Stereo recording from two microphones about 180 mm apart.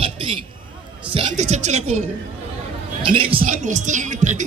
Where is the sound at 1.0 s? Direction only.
30° right (ahead or behind).